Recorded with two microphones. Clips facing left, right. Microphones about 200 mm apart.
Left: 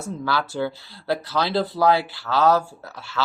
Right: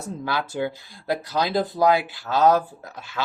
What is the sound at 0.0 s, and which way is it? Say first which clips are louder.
Speech: left 2 dB; 20° right (ahead or behind).